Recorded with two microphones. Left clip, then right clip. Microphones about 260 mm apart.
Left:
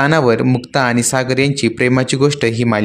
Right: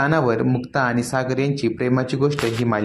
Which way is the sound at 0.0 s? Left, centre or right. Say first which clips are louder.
Left 6 dB; left.